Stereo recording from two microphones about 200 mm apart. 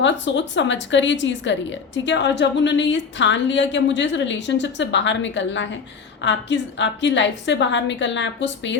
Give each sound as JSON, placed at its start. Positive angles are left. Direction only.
{"t": 0.0, "sound": "a woman's voice", "side_deg": 65}